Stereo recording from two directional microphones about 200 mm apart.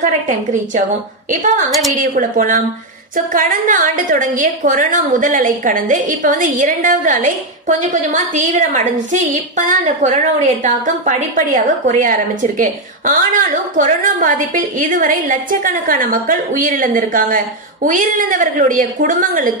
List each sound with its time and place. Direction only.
0.0 s a woman's voice: 40° right (ahead or behind)
1.7 s a woman's voice: centre (ahead or behind)
2.1 s a woman's voice: 40° right (ahead or behind)